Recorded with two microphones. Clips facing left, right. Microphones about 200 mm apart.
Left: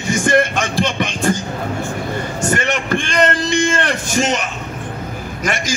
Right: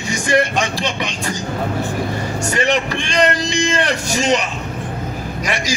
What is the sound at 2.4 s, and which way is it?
A man's voice, 50° left (ahead or behind).